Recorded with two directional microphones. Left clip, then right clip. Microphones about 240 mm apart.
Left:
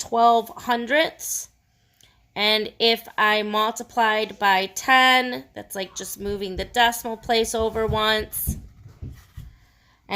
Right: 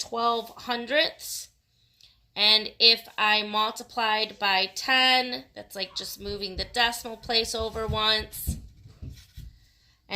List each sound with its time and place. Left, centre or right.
0.1 s speech: left
2.3 s speech: left
5.9 s speech: left
6.1 s speech: left